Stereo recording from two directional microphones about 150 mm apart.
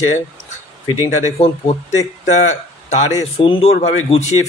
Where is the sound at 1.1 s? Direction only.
45° left (ahead or behind).